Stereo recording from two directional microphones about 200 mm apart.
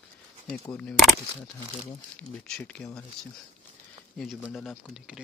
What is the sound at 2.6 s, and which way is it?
Speech, 5° left (ahead or behind).